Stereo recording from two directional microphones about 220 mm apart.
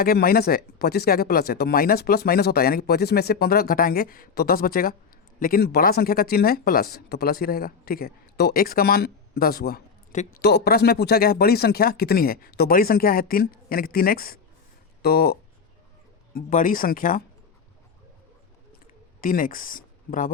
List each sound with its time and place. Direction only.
0.0 s speech: 40° left (ahead or behind)
19.2 s speech: 40° left (ahead or behind)